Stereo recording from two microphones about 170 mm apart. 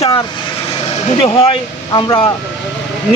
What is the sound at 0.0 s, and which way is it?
Vehicle, 35° left (ahead or behind).